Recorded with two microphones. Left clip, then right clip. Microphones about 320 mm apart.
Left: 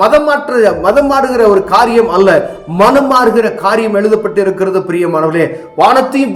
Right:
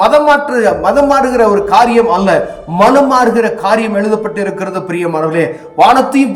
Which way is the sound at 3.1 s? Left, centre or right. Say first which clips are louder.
Left 1 dB; centre.